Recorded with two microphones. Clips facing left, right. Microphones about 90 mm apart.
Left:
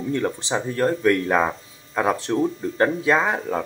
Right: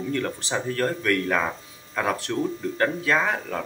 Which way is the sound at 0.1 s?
20° left (ahead or behind).